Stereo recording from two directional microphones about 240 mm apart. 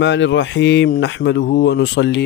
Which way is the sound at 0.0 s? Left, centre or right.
Left.